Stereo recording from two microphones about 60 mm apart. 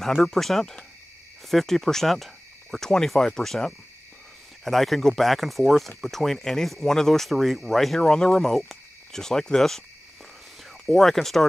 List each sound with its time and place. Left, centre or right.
0.0 s speech: centre
10.9 s speech: centre